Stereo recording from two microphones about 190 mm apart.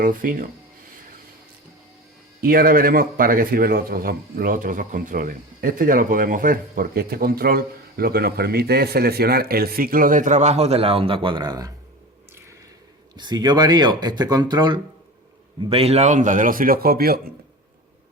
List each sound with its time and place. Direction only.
0.0 s a man's voice: 45° right (ahead or behind)
2.4 s a man's voice: 50° right (ahead or behind); by 11.7 s 20° right (ahead or behind)
13.1 s a man's voice: 20° right (ahead or behind); by 17.2 s 50° right (ahead or behind)